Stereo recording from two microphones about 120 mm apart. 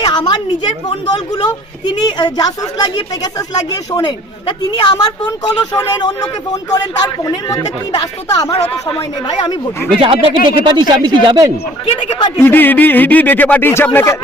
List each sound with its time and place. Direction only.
0.0 s a woman's voice: 40° left (ahead or behind)
1.8 s a woman's voice: 35° left (ahead or behind)
8.9 s speech: 50° left (ahead or behind)
10.0 s speech: 45° right (ahead or behind)
11.9 s a woman's voice: 40° left (ahead or behind)
12.4 s speech: 15° left (ahead or behind)